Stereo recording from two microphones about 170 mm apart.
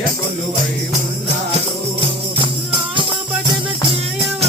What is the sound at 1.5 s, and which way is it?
Music, 35° right (ahead or behind).